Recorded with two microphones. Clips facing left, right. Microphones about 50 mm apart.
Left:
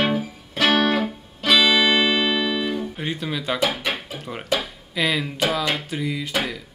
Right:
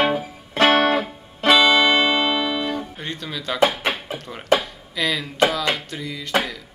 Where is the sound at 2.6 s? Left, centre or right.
Centre.